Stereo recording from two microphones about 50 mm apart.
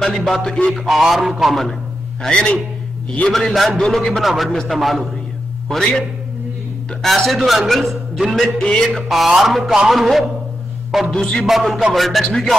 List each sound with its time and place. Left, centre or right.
0.0 s music: centre
0.8 s speech: centre
2.2 s music: centre
3.3 s speech: centre
7.0 s speech: centre
8.5 s music: centre
8.8 s speech: centre
11.1 s music: centre
11.4 s speech: centre